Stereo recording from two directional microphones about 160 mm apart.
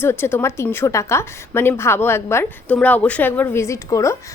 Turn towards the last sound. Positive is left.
turn(degrees=20)  # may be behind; listen again after turning